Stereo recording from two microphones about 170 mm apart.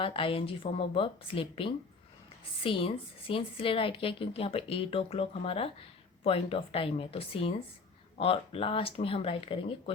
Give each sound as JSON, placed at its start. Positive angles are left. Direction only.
{"t": 0.0, "sound": "a woman's voice", "side_deg": 30}